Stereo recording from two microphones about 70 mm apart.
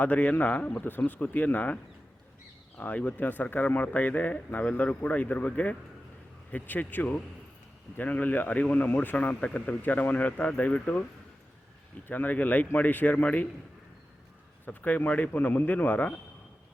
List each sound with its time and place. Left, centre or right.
0.0 s speech: left
12.0 s speech: left
14.6 s speech: left